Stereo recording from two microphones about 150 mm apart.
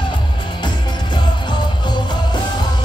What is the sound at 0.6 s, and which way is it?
Music, 30° left (ahead or behind).